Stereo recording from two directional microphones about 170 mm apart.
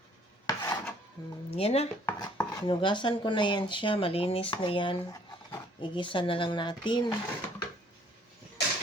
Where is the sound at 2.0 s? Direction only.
15° left (ahead or behind).